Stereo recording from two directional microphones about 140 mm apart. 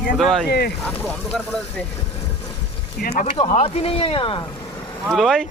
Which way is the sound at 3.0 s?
90° left.